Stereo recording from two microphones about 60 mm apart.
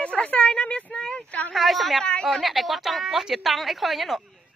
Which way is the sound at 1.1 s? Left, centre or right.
Left.